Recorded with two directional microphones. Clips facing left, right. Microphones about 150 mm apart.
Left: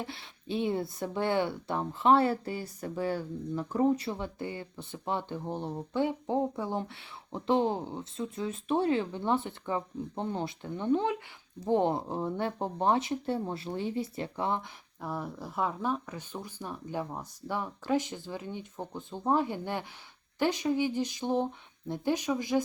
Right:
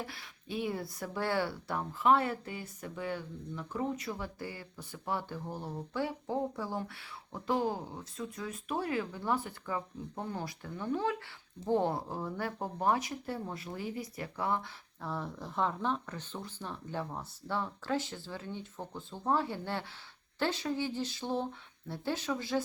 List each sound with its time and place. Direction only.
0.0 s speech: 25° left (ahead or behind)